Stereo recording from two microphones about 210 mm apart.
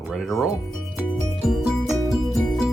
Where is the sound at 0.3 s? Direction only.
Centre (ahead or behind).